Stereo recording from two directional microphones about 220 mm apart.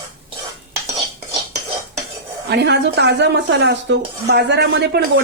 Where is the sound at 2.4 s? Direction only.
50° right (ahead or behind).